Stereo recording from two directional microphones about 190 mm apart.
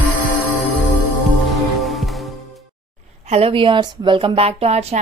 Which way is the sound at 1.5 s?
Centre (ahead or behind).